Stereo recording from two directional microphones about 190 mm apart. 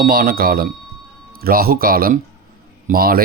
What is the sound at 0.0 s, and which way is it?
A man's voice, 50° right (ahead or behind).